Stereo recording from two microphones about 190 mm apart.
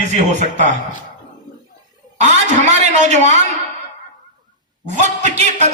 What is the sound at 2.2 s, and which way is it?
A man's voice, 40° right (ahead or behind).